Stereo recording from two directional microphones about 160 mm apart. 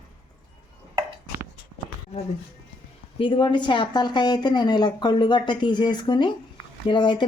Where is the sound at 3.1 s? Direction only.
30° left (ahead or behind).